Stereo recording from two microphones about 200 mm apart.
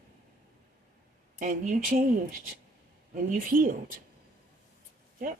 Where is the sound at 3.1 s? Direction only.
40° right (ahead or behind).